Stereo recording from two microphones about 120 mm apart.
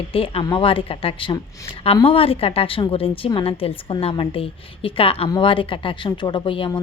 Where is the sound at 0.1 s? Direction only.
50° left (ahead or behind).